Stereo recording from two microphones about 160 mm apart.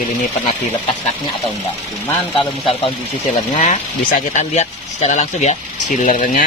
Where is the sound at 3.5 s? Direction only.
50° left (ahead or behind).